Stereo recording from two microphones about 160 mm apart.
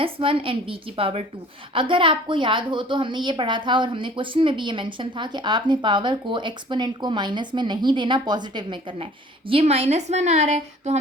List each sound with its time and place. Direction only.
0.0 s a woman's voice: 35° right (ahead or behind)